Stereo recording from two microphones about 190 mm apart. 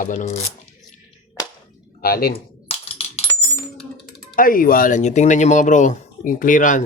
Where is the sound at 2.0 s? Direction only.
55° left (ahead or behind).